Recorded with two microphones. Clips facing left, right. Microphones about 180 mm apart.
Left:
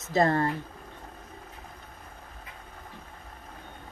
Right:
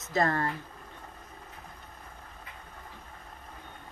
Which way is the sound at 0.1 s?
30° left (ahead or behind).